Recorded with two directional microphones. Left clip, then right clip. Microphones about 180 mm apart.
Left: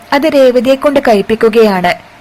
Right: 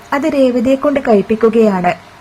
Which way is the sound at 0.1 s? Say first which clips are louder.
Left 6 dB; 15° left (ahead or behind).